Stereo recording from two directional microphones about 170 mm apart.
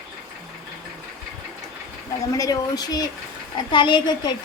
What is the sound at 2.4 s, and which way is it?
A woman's voice, 20° left (ahead or behind).